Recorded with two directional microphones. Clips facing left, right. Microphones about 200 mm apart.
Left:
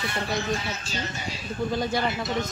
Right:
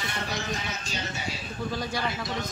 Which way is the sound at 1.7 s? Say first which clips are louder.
Left 6 dB; 25° left (ahead or behind).